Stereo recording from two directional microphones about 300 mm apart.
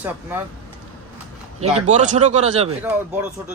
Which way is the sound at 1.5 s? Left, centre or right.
Right.